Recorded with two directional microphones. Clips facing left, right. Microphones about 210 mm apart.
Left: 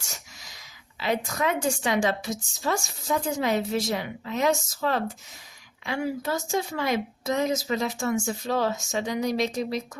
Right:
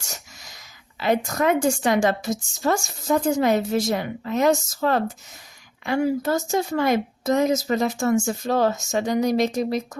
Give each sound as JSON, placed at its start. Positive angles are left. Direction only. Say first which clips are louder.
{"t": 0.9, "sound": "a woman's voice", "louder": "right 5 dB", "side_deg": -50}